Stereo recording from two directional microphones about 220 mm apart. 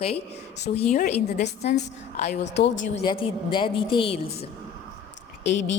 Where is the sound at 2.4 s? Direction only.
55° left (ahead or behind).